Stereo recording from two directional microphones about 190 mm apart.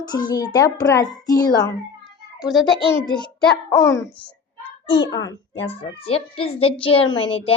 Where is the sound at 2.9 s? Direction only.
20° left (ahead or behind).